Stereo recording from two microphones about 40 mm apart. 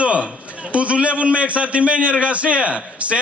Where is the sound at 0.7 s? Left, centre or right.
Right.